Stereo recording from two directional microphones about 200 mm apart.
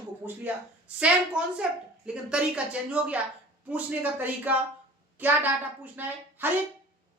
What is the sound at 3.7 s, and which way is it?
A woman's voice, 10° right (ahead or behind).